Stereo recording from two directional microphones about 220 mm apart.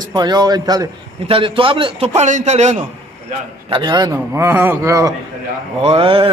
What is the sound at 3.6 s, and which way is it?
A man's voice, 20° right (ahead or behind).